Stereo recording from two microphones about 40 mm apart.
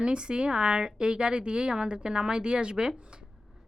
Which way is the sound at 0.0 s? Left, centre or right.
Right.